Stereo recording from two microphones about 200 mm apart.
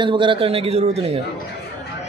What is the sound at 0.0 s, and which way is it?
A man's voice, 25° right (ahead or behind).